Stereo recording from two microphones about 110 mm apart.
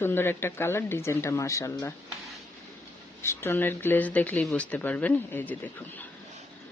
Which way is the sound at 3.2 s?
20° left (ahead or behind).